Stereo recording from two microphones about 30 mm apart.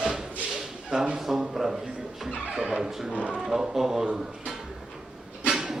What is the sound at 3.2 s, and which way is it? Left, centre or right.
Speech, right.